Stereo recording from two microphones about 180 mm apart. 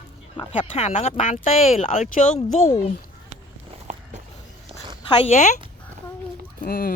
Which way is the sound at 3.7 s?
40° right (ahead or behind).